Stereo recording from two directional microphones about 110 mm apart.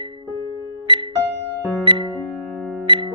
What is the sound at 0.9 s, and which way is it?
Music, 50° right (ahead or behind).